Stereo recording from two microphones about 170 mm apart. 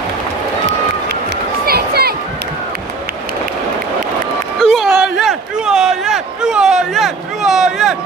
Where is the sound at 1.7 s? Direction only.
65° right (ahead or behind).